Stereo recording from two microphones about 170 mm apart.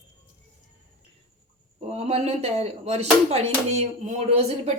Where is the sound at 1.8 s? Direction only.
35° right (ahead or behind).